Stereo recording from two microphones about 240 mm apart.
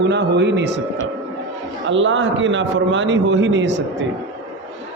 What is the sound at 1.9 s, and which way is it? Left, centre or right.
A man's voice, right.